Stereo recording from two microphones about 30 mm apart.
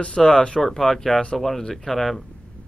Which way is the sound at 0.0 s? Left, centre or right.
Left.